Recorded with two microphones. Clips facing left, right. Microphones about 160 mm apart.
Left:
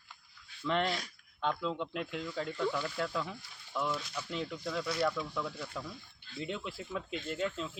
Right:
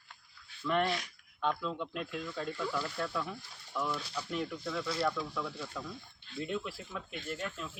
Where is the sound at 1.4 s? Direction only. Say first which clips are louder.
Even; 20° left (ahead or behind).